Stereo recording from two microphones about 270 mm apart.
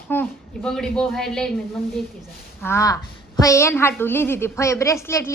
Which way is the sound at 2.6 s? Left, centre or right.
Centre.